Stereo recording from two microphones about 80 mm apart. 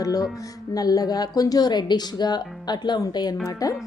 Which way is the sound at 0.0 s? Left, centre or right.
Left.